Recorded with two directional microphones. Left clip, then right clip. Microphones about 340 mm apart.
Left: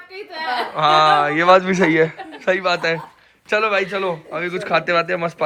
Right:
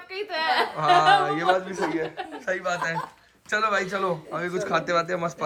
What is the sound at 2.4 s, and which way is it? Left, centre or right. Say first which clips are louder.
A man's voice: left 9 dB; centre.